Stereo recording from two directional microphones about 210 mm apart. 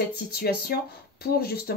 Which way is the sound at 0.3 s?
50° left (ahead or behind).